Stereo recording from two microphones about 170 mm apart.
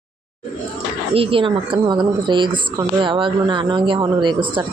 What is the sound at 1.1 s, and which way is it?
Speech, 30° right (ahead or behind).